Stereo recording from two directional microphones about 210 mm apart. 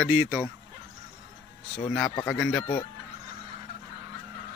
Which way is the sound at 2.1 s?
15° left (ahead or behind).